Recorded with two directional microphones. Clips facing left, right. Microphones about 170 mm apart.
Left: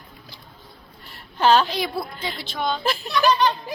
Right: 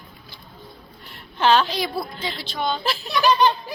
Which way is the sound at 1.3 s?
10° left (ahead or behind).